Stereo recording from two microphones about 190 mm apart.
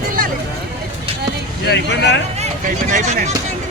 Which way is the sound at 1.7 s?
65° left (ahead or behind).